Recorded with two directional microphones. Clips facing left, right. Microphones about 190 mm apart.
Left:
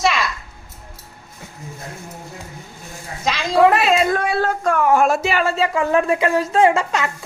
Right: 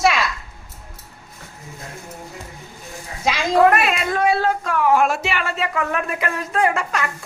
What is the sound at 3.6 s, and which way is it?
Speech, 25° left (ahead or behind).